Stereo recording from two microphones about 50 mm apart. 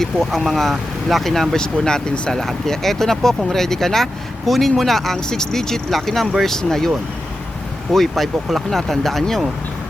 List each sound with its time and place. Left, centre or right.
0.0 s speech: centre
2.4 s speech: centre
7.9 s speech: centre